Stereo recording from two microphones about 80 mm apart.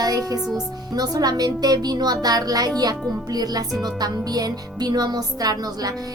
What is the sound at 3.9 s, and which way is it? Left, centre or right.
A woman's voice, right.